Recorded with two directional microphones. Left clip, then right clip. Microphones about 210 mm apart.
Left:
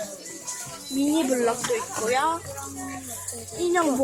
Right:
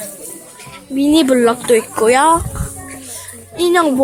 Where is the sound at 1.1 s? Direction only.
30° right (ahead or behind).